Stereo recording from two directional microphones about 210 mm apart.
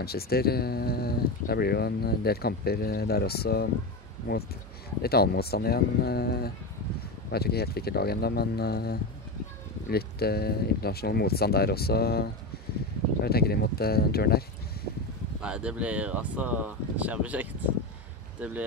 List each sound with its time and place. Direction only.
0.0 s speech: 45° left (ahead or behind)
5.0 s speech: 50° left (ahead or behind)
15.4 s speech: 5° right (ahead or behind)